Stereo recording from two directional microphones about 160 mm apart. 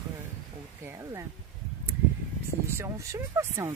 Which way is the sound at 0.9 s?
20° right (ahead or behind).